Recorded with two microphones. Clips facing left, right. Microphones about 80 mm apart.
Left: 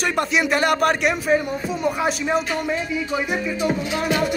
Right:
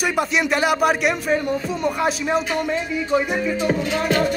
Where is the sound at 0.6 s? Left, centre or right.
Centre.